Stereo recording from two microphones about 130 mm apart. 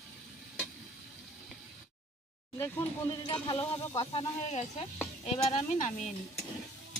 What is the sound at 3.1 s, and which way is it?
Speech, 35° left (ahead or behind).